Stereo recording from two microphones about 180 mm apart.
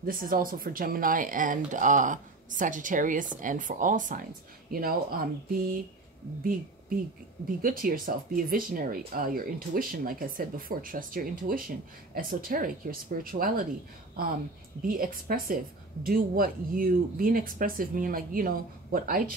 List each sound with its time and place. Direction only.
0.0 s speech: 50° right (ahead or behind)
7.6 s speech: 55° right (ahead or behind)
14.8 s speech: 50° right (ahead or behind)